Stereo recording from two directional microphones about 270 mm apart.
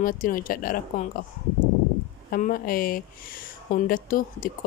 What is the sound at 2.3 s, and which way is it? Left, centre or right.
Speech, left.